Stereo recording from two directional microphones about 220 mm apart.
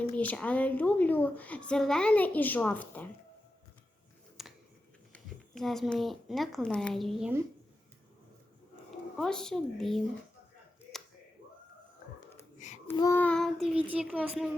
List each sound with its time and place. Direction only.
0.0 s a woman's voice: 5° left (ahead or behind)
4.4 s a sound: centre (ahead or behind)
5.1 s speech: centre (ahead or behind)
9.1 s child singing: 5° left (ahead or behind)
12.4 s a sound: 35° left (ahead or behind)
12.9 s child singing: 10° left (ahead or behind)